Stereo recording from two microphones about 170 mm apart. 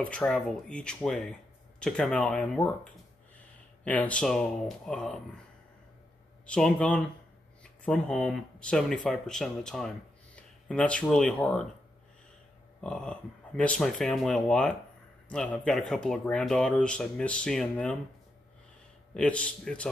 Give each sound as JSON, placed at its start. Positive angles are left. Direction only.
{"t": 0.0, "sound": "speech", "side_deg": 5}
{"t": 6.4, "sound": "speech", "side_deg": 5}
{"t": 12.8, "sound": "speech", "side_deg": 5}
{"t": 19.1, "sound": "speech", "side_deg": 5}